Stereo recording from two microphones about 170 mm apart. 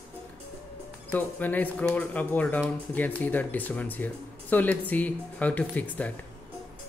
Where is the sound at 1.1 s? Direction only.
10° left (ahead or behind).